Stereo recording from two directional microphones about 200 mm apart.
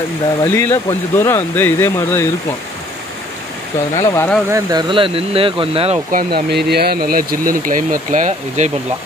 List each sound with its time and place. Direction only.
0.4 s speech: 15° left (ahead or behind)
3.9 s speech: 15° left (ahead or behind)
4.5 s speech: 15° right (ahead or behind)
6.1 s speech: 55° right (ahead or behind); by 8.7 s 35° right (ahead or behind)